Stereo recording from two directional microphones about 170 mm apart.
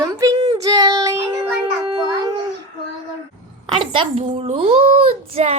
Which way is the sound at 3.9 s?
35° right (ahead or behind).